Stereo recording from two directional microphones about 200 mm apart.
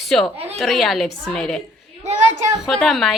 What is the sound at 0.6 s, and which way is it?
A man's voice, centre (ahead or behind).